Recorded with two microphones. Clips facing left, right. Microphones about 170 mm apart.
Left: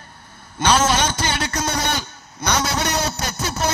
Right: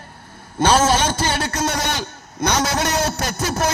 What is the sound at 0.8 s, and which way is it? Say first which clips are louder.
Speech: right 2 dB; 35° right (ahead or behind).